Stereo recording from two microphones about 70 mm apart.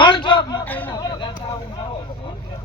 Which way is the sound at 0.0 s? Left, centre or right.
Left.